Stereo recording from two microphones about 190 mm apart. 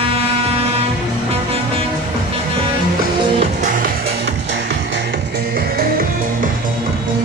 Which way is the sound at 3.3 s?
45° right (ahead or behind).